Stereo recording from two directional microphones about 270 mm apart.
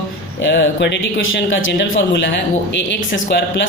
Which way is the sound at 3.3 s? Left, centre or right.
Left.